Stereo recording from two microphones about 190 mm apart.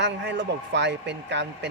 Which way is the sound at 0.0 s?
65° right (ahead or behind).